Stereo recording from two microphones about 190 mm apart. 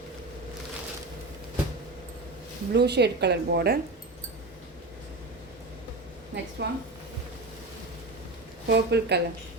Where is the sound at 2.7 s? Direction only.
60° right (ahead or behind).